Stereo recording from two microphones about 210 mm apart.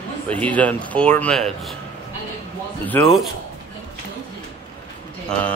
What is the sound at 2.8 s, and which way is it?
Speech, 10° left (ahead or behind).